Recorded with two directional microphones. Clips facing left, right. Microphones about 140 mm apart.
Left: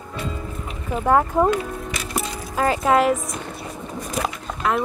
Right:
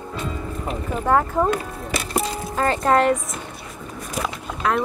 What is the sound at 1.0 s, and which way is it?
Speech, 15° left (ahead or behind).